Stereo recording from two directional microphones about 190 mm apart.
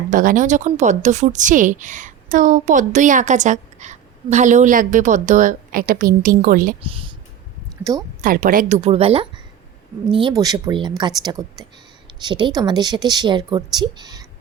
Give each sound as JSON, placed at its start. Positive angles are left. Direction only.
{"t": 0.1, "sound": "a woman's voice", "side_deg": -45}
{"t": 6.8, "sound": "a woman's voice", "side_deg": -30}
{"t": 8.2, "sound": "a woman's voice", "side_deg": -45}
{"t": 8.8, "sound": "a woman's voice", "side_deg": -30}